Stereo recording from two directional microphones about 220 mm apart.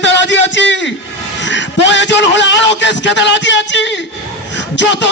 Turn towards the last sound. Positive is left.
turn(degrees=55)  # may be behind; listen again after turning